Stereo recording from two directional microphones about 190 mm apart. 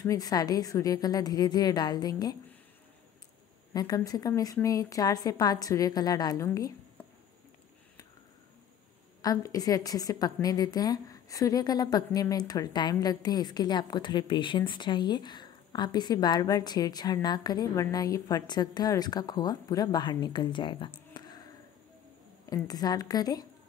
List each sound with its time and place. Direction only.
0.0 s a woman's voice: 20° left (ahead or behind)
3.7 s a woman's voice: 20° left (ahead or behind)
9.2 s a woman's voice: 20° left (ahead or behind)
22.5 s a woman's voice: 20° left (ahead or behind)